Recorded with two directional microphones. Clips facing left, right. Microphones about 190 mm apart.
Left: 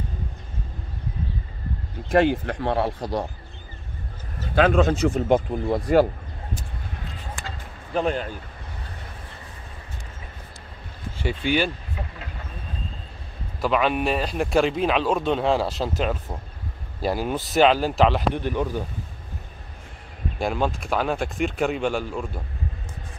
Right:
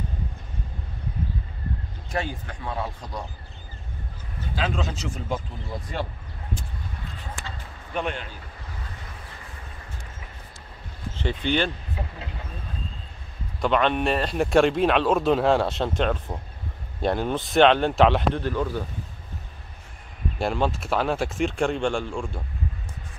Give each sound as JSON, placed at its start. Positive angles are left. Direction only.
{"t": 2.0, "sound": "speech", "side_deg": 65}
{"t": 4.6, "sound": "speech", "side_deg": 55}
{"t": 7.9, "sound": "speech", "side_deg": 35}
{"t": 11.1, "sound": "speech", "side_deg": 10}
{"t": 13.6, "sound": "speech", "side_deg": 5}
{"t": 18.3, "sound": "speech", "side_deg": 15}
{"t": 20.3, "sound": "speech", "side_deg": 0}